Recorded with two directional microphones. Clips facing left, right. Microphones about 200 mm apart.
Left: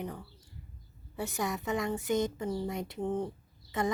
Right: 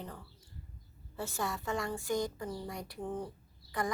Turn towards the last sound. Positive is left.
turn(degrees=25)  # may be behind; listen again after turning